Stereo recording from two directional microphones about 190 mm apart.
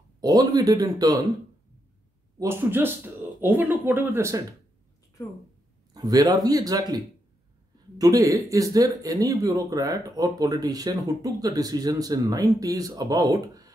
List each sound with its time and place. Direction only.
0.2 s speech: 20° right (ahead or behind)
2.3 s speech: 15° right (ahead or behind)
5.9 s speech: 20° right (ahead or behind)